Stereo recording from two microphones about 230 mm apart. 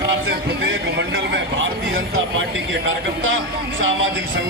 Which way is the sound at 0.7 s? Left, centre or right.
Right.